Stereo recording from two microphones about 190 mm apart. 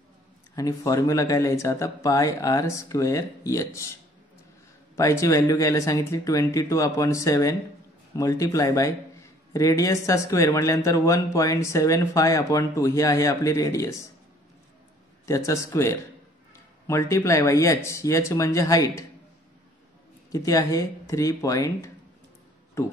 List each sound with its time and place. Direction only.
0.6 s a man's voice: 20° left (ahead or behind)
4.9 s a man's voice: 15° left (ahead or behind)
15.2 s a man's voice: 15° left (ahead or behind)
20.2 s a man's voice: 20° left (ahead or behind)